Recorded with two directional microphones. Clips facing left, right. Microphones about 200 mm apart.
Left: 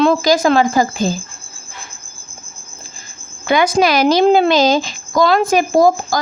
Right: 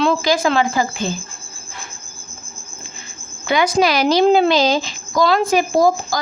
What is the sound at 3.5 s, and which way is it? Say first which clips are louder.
Speech: left 2 dB; 50° left (ahead or behind).